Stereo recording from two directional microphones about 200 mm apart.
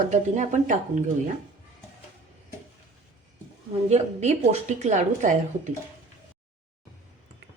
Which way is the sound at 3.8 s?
35° right (ahead or behind).